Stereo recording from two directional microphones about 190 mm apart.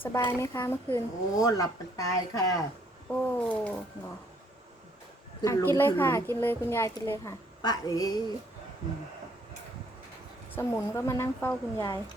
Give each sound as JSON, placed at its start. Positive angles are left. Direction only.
{"t": 0.0, "sound": "speech", "side_deg": 15}
{"t": 3.1, "sound": "speech", "side_deg": 5}
{"t": 5.4, "sound": "speech", "side_deg": 15}
{"t": 10.5, "sound": "speech", "side_deg": 15}